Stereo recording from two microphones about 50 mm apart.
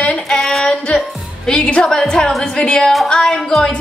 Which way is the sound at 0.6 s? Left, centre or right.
Centre.